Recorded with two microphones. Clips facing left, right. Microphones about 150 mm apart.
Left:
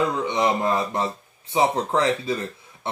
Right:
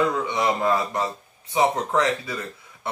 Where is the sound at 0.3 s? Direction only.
25° left (ahead or behind).